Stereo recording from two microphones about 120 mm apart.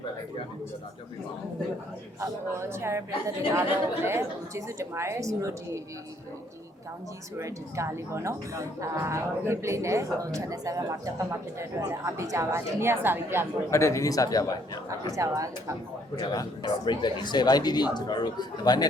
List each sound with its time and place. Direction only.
2.6 s a woman's voice: 20° right (ahead or behind)
7.3 s a woman's voice: 25° right (ahead or behind)
13.7 s speech: 25° left (ahead or behind)
15.1 s a woman's voice: 25° right (ahead or behind)
16.1 s a man's voice: 35° left (ahead or behind)